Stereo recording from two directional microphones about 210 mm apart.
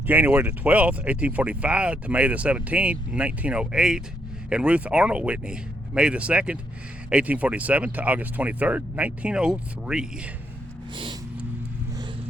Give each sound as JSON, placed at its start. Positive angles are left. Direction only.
{"t": 0.1, "sound": "speech", "side_deg": -10}
{"t": 10.9, "sound": "vehicle", "side_deg": -20}